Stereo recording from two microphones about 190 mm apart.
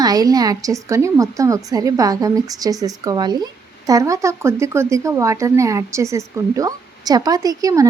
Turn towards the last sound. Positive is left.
turn(degrees=-20)  # may be behind; listen again after turning